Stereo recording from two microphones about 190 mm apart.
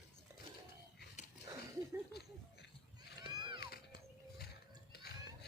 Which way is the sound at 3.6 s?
55° left (ahead or behind).